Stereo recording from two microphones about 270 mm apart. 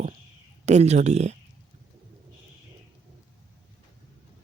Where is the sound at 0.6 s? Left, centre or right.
Right.